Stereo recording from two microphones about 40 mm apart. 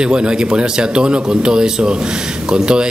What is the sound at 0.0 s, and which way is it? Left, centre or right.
Speech, right.